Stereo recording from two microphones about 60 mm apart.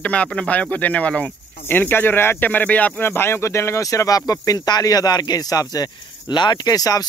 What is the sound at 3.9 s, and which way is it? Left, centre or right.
Speech, left.